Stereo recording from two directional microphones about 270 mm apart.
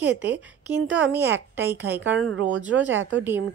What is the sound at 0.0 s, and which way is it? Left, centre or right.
A woman's voice, centre.